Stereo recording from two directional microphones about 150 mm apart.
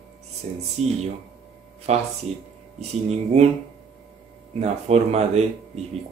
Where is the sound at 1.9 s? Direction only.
45° right (ahead or behind).